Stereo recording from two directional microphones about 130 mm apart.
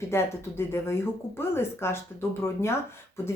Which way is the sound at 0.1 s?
20° left (ahead or behind).